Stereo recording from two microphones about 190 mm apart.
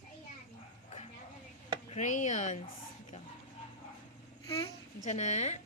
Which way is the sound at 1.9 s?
40° left (ahead or behind).